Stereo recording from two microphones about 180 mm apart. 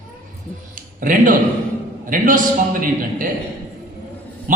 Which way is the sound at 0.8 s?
50° right (ahead or behind).